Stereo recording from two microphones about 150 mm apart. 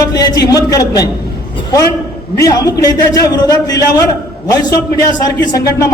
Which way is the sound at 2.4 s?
25° left (ahead or behind).